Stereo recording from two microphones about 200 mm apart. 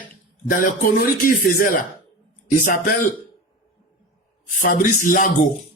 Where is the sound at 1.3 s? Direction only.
45° left (ahead or behind).